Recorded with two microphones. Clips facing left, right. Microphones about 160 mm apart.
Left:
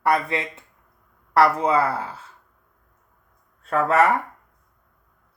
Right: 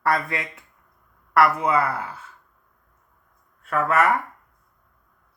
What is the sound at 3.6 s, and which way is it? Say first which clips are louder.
Speech: left 2 dB; 30° left (ahead or behind).